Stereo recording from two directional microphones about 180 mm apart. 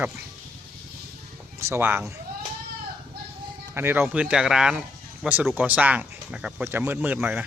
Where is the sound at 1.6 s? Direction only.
15° right (ahead or behind).